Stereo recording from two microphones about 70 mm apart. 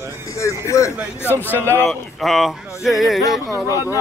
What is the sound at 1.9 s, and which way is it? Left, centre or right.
Speech, centre.